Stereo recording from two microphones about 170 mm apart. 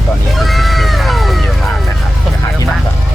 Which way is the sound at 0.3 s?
Centre (ahead or behind).